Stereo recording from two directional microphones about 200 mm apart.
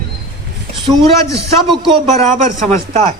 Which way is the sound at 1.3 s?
25° right (ahead or behind).